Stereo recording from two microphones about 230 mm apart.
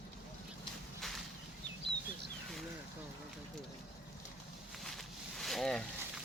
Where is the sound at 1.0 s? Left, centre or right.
Centre.